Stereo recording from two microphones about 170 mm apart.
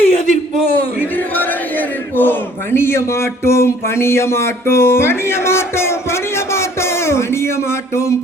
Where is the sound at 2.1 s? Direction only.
10° left (ahead or behind).